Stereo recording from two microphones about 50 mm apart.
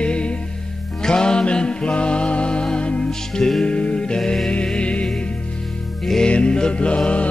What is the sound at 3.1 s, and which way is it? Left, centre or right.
Music, centre.